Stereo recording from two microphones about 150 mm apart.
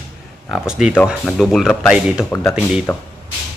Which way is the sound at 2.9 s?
15° left (ahead or behind).